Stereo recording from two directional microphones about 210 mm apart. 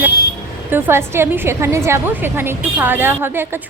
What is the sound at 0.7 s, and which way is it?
A woman's voice, 10° right (ahead or behind).